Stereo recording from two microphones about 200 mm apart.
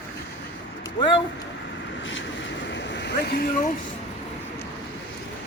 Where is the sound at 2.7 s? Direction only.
60° left (ahead or behind).